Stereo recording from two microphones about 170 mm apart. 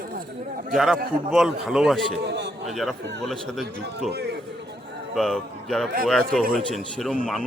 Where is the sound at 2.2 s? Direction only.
85° right.